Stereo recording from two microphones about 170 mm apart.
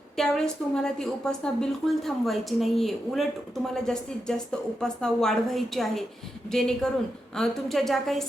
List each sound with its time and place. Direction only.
0.2 s a woman's voice: 5° left (ahead or behind)